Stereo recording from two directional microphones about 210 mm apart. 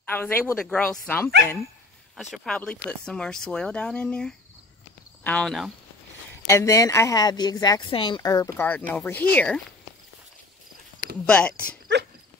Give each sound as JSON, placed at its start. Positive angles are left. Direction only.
{"t": 0.0, "sound": "speech", "side_deg": 10}
{"t": 2.3, "sound": "speech", "side_deg": 5}
{"t": 6.5, "sound": "speech", "side_deg": 15}
{"t": 11.2, "sound": "speech", "side_deg": 5}
{"t": 11.9, "sound": "dog", "side_deg": -55}